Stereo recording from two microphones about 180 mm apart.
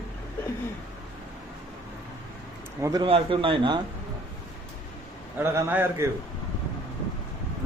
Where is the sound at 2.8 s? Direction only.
20° right (ahead or behind).